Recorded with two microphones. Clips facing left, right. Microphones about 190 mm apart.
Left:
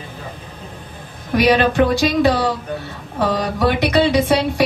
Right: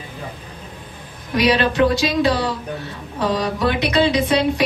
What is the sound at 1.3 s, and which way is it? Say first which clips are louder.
Speech: left 3 dB; 50° left (ahead or behind).